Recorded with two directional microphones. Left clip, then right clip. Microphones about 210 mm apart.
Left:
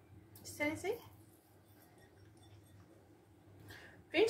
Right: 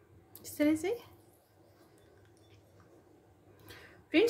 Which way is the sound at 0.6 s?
50° right (ahead or behind).